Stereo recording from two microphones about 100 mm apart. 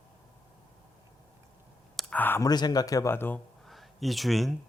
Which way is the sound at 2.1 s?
20° left (ahead or behind).